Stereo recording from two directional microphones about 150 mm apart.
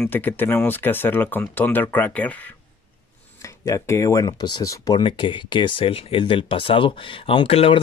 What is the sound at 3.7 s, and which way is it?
Speech, 20° left (ahead or behind).